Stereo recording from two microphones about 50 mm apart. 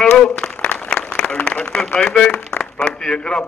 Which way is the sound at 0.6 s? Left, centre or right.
Left.